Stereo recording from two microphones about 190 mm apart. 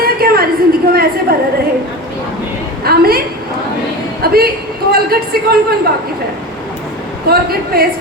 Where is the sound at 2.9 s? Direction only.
55° right (ahead or behind).